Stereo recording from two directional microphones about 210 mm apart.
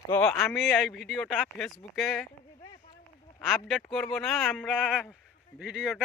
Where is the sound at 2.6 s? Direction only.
20° left (ahead or behind).